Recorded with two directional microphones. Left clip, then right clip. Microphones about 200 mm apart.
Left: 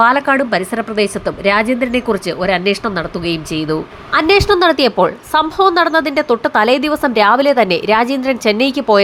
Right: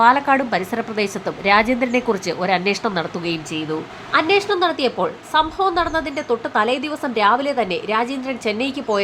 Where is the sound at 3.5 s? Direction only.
30° left (ahead or behind).